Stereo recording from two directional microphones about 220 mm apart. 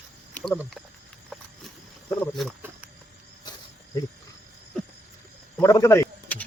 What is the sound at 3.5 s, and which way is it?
Wild animals, 20° left (ahead or behind).